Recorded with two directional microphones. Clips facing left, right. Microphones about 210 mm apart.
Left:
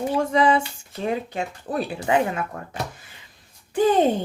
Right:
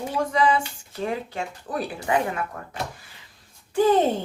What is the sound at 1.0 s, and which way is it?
Speech, 20° left (ahead or behind).